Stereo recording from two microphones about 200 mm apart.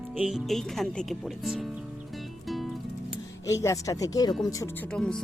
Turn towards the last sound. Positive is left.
turn(degrees=5)  # may be behind; listen again after turning